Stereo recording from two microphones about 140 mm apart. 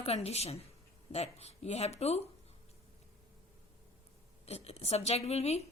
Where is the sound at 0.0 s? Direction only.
50° left (ahead or behind).